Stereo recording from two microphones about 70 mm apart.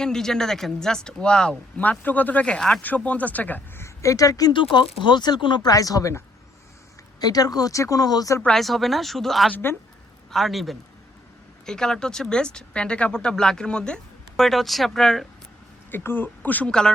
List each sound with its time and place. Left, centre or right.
0.0 s speech: centre
1.8 s speech: left
2.8 s speech: left
3.8 s speech: left
7.2 s speech: left
8.5 s speech: centre
15.9 s speech: left